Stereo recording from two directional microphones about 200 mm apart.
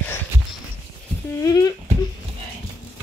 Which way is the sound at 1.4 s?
20° left (ahead or behind).